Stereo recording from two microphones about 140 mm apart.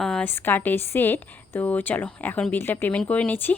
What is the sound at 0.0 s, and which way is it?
A woman's voice, 5° left (ahead or behind).